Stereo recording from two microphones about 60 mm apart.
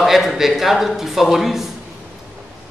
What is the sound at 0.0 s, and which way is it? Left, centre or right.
Speech, centre.